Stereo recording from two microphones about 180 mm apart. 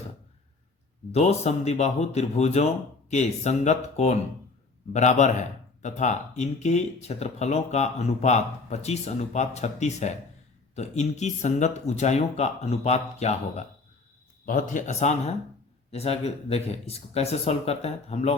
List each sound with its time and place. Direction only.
1.1 s speech: 35° left (ahead or behind)